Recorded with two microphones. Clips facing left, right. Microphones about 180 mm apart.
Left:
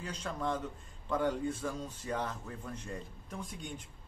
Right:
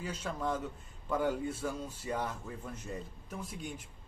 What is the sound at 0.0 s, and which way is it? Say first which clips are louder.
Speech: right 1 dB; 5° right (ahead or behind).